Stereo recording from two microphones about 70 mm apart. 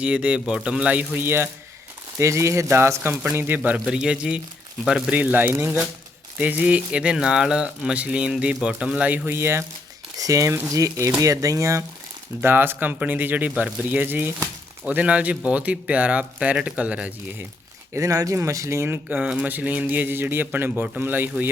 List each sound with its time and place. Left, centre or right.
0.0 s speech: centre; by 1.5 s right
2.1 s speech: right
3.3 s speech: right; by 5.1 s centre
5.1 s speech: right
10.2 s speech: right
12.4 s speech: right
13.5 s speech: centre
13.8 s speech: right
17.9 s speech: right
19.0 s speech: centre